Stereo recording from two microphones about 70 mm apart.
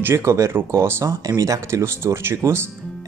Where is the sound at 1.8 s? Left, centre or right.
Right.